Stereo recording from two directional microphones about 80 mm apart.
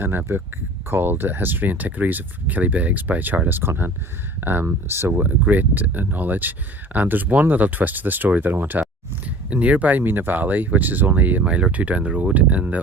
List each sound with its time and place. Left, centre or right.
0.0 s speech: right